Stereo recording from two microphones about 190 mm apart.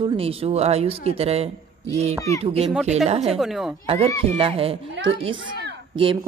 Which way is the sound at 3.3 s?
Centre (ahead or behind).